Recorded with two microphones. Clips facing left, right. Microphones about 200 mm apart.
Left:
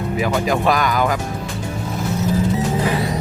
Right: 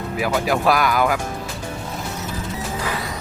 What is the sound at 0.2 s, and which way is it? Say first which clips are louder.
Speech: left 1 dB; 5° right (ahead or behind).